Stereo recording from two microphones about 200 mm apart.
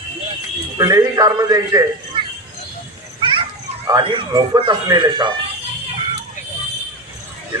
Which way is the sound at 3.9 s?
25° right (ahead or behind).